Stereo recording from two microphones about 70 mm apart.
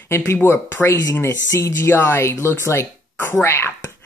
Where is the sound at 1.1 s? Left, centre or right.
Left.